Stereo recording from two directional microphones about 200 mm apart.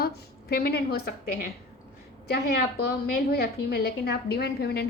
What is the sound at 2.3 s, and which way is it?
A woman's voice, 50° left (ahead or behind).